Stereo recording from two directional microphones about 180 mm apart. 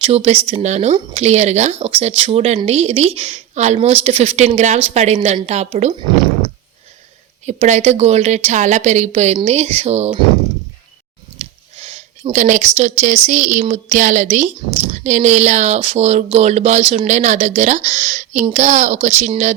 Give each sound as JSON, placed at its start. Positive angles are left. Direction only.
{"t": 0.0, "sound": "a woman's voice", "side_deg": -35}
{"t": 7.4, "sound": "a woman's voice", "side_deg": -35}
{"t": 11.3, "sound": "a sound", "side_deg": -40}
{"t": 13.2, "sound": "a woman's voice", "side_deg": -45}